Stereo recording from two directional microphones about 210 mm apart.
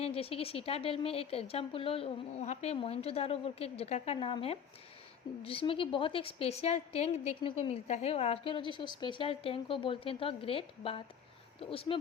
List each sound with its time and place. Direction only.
0.0 s a woman's voice: 25° left (ahead or behind)